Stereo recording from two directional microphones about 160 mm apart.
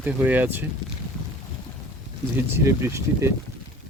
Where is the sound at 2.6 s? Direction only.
15° right (ahead or behind).